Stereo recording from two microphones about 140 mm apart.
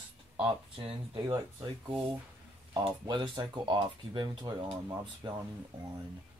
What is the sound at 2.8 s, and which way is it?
Speech, 35° right (ahead or behind).